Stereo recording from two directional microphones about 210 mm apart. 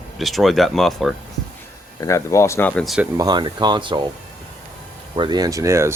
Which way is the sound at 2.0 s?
15° left (ahead or behind).